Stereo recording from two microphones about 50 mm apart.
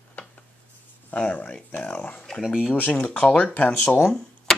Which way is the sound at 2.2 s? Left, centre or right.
Centre.